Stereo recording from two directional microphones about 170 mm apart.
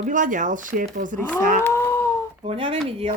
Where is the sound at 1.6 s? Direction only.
15° left (ahead or behind).